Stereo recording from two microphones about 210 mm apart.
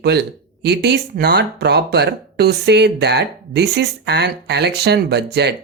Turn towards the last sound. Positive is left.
turn(degrees=-50)  # may be behind; listen again after turning